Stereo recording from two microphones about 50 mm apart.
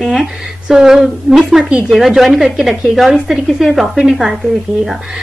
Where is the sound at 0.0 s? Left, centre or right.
Centre.